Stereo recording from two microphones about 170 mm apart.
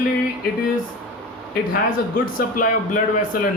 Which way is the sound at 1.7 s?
55° left (ahead or behind).